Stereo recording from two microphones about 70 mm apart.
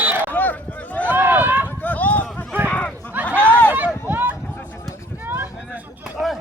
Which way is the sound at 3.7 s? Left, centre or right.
Right.